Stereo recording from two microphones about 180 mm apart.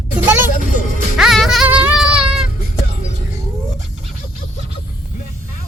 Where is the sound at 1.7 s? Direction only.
10° right (ahead or behind).